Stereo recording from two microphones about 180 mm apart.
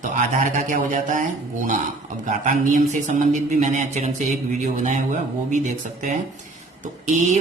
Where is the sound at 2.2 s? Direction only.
45° right (ahead or behind).